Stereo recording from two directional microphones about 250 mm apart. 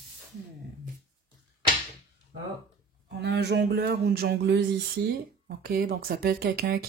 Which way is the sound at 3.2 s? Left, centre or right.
Right.